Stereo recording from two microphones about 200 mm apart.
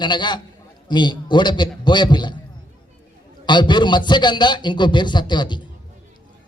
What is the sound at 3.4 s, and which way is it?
A man's voice, 20° left (ahead or behind).